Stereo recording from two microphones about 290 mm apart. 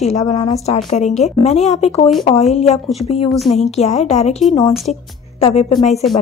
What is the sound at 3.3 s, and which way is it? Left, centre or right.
Speech, centre.